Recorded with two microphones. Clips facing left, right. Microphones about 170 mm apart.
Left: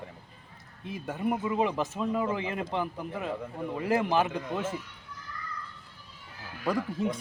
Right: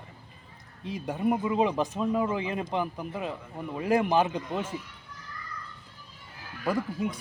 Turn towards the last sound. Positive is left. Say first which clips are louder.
# even
turn(degrees=0)  # may be behind; listen again after turning